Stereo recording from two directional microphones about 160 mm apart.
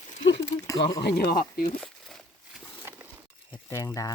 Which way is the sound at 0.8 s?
90° left.